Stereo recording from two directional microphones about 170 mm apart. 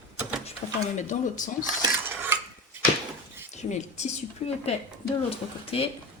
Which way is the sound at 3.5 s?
45° left (ahead or behind).